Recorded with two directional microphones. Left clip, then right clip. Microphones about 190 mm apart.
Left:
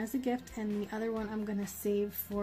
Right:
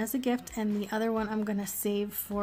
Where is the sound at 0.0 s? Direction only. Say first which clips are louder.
Right 4 dB; 40° right (ahead or behind).